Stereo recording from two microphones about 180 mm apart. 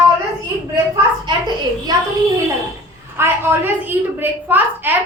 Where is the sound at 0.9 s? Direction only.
25° right (ahead or behind).